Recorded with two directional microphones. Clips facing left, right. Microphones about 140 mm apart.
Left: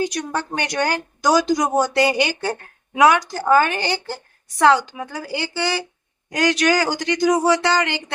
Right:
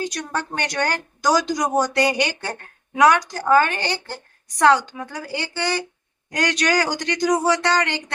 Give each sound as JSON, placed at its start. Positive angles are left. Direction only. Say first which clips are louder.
{"t": 0.0, "sound": "speech", "louder": "left 3 dB", "side_deg": 10}